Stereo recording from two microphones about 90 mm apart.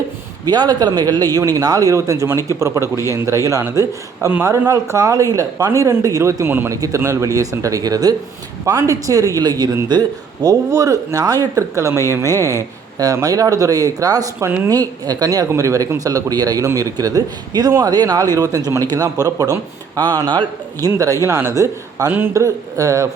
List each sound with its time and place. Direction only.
0.4 s a man's voice: 50° right (ahead or behind)
12.2 s speech: 30° left (ahead or behind)
13.1 s a man's voice: 40° right (ahead or behind)
20.2 s a man's voice: 60° right (ahead or behind)
21.2 s speech: 30° right (ahead or behind)
22.1 s speech: 25° right (ahead or behind)
22.4 s speech: 40° right (ahead or behind)